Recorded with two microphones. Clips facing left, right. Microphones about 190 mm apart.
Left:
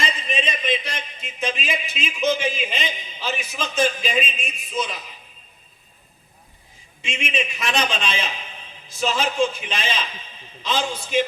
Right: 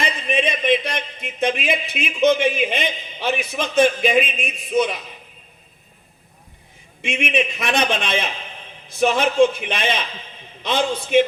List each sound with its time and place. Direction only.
0.0 s speech: 60° right (ahead or behind)
7.0 s a man's voice: 60° right (ahead or behind)